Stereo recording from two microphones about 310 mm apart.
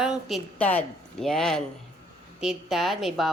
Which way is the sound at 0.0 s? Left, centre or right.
Centre.